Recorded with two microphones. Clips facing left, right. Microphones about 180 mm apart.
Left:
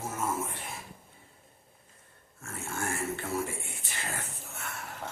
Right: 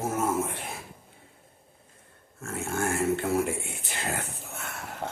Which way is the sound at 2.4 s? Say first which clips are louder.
Right 6 dB; 80° right.